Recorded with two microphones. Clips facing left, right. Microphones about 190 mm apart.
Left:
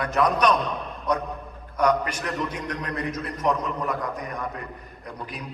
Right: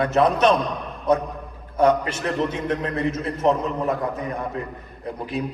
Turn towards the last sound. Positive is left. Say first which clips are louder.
# right 8 dB
turn(degrees=-25)  # may be behind; listen again after turning